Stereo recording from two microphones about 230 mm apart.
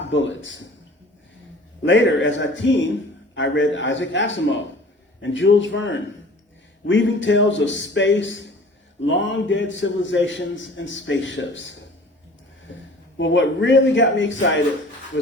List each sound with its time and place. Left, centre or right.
0.1 s a man's voice: left
1.8 s a man's voice: left
13.1 s a man's voice: left